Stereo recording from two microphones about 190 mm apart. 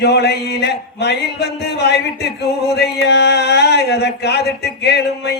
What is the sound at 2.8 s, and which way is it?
Speech, 65° left (ahead or behind).